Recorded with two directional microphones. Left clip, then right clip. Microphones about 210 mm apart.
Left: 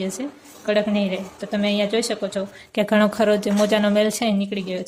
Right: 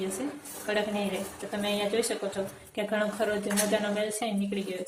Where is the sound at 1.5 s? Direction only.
50° left (ahead or behind).